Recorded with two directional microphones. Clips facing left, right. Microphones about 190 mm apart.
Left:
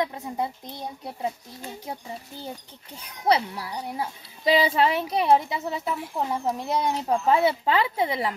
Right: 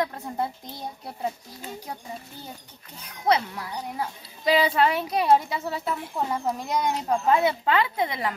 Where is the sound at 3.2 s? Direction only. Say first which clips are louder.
Left 1 dB; 30° left (ahead or behind).